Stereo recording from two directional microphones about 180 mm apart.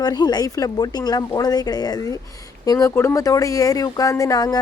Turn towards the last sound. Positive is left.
turn(degrees=20)  # may be behind; listen again after turning